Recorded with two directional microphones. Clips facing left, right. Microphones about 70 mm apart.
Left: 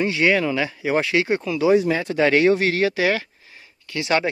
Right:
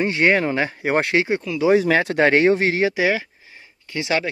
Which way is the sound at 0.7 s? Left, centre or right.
Right.